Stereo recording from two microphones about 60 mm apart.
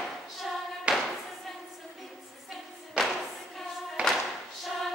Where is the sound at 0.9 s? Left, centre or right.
Centre.